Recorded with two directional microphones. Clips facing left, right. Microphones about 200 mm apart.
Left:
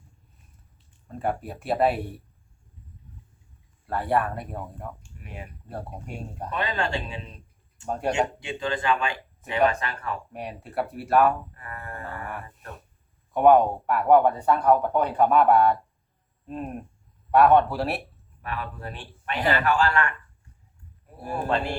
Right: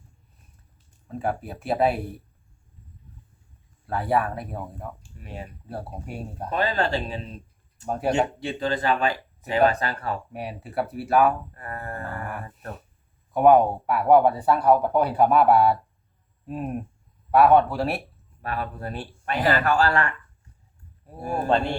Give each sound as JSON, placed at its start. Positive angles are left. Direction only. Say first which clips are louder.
{"t": 1.0, "sound": "speech", "louder": "right 1 dB", "side_deg": 0}
{"t": 3.8, "sound": "speech", "louder": "right 1 dB", "side_deg": 0}
{"t": 5.0, "sound": "a sound", "louder": "right 3 dB", "side_deg": -35}
{"t": 5.6, "sound": "speech", "louder": "even", "side_deg": -5}
{"t": 6.5, "sound": "speech", "louder": "right 4 dB", "side_deg": -35}
{"t": 7.9, "sound": "speech", "louder": "right 2 dB", "side_deg": -5}
{"t": 8.5, "sound": "speech", "louder": "right 1 dB", "side_deg": -40}
{"t": 10.3, "sound": "speech", "louder": "right 1 dB", "side_deg": -5}
{"t": 11.5, "sound": "speech", "louder": "right 4 dB", "side_deg": -40}
{"t": 12.0, "sound": "a sound", "louder": "right 2 dB", "side_deg": 0}
{"t": 13.3, "sound": "speech", "louder": "right 1 dB", "side_deg": -5}
{"t": 18.4, "sound": "speech", "louder": "right 3 dB", "side_deg": -40}
{"t": 21.2, "sound": "speech", "louder": "right 3 dB", "side_deg": 0}